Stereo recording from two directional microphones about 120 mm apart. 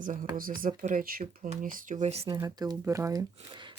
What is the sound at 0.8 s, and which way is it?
Speech, 80° right.